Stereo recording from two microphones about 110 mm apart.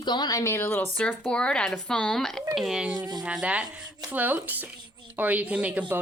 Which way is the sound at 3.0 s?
35° right (ahead or behind).